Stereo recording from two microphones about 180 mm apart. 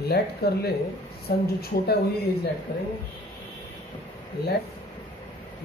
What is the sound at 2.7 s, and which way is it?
Speech, 55° left (ahead or behind).